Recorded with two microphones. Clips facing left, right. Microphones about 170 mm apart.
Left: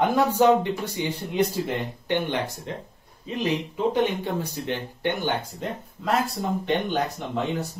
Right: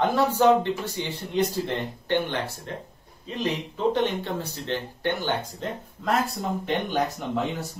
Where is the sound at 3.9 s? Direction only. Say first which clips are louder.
Left 2 dB; 10° left (ahead or behind).